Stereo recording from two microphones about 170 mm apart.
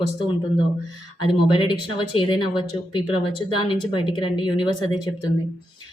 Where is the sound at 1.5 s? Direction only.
30° left (ahead or behind).